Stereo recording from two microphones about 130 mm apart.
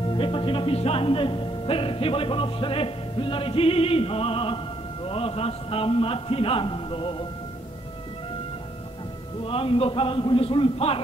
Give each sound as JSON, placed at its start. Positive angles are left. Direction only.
{"t": 0.0, "sound": "music", "side_deg": 40}
{"t": 9.4, "sound": "music", "side_deg": 45}